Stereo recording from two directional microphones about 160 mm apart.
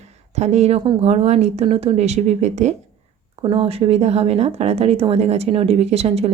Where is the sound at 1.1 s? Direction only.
40° right (ahead or behind).